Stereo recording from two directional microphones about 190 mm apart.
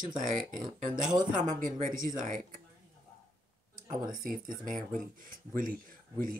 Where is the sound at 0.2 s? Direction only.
45° right (ahead or behind).